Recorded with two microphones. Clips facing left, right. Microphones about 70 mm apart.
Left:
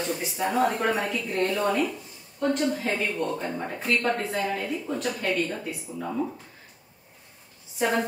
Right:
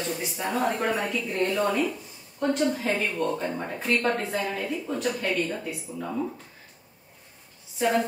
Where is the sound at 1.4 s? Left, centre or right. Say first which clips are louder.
Right 1 dB; centre.